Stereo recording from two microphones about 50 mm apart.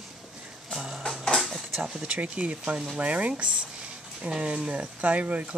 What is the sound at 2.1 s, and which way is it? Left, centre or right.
Speech, right.